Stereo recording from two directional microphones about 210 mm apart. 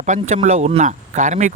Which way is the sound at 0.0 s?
35° right (ahead or behind).